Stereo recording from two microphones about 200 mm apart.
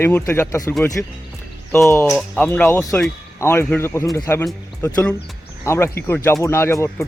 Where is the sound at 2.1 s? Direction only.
Centre (ahead or behind).